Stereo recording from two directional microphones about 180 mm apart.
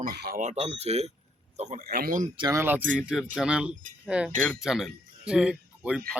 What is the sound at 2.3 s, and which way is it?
Speech, 25° right (ahead or behind).